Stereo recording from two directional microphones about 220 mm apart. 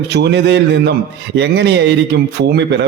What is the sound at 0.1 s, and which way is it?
A man's voice, 50° right (ahead or behind).